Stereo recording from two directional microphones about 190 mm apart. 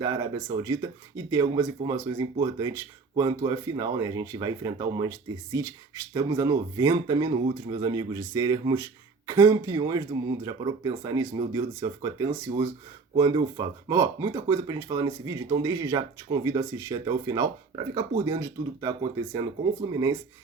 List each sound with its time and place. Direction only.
0.0 s speech: 20° right (ahead or behind)